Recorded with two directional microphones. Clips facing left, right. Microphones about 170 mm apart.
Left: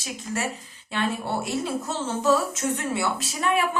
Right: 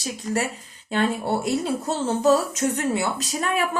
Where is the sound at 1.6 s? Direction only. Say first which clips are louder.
Right 4 dB; 40° right (ahead or behind).